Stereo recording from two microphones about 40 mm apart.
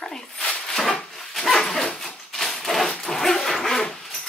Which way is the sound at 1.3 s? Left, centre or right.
Centre.